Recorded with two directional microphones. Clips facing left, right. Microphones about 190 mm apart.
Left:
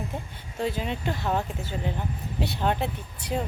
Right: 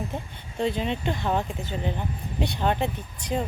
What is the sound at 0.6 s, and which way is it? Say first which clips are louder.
Speech: right 3 dB; 5° left (ahead or behind).